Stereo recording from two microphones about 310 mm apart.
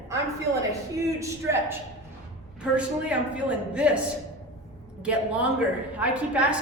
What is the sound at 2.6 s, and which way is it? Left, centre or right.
Speech, centre.